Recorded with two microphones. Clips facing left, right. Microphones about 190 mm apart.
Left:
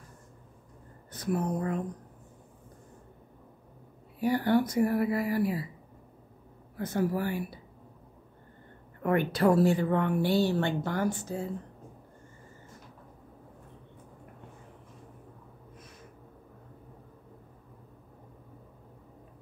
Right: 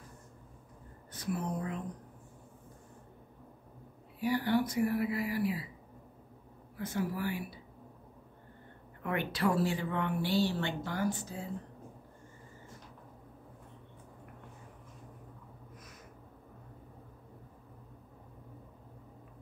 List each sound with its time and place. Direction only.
1.2 s a woman's voice: 50° left (ahead or behind)
4.2 s a woman's voice: 50° left (ahead or behind)
6.9 s a woman's voice: 45° left (ahead or behind)
9.0 s a woman's voice: 45° left (ahead or behind)